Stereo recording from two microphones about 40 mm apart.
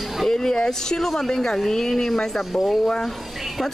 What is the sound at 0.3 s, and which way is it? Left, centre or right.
Speech, centre.